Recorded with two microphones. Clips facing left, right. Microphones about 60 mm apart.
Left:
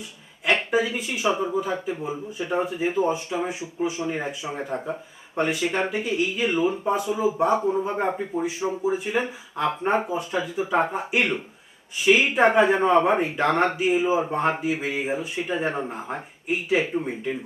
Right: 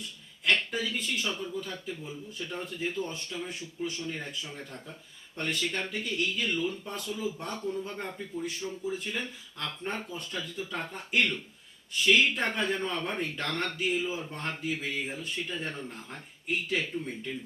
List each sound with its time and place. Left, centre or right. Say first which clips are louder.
0.4 s speech: left 7 dB; centre
8.1 s speech: left 10 dB; left
8.4 s speech: left 10 dB; centre